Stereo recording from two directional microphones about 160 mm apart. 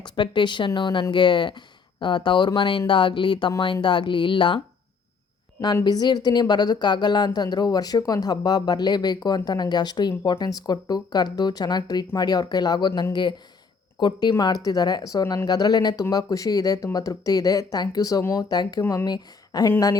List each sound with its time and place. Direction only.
0.0 s speech: 30° left (ahead or behind)